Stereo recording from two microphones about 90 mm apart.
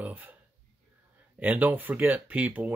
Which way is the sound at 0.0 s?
20° right (ahead or behind).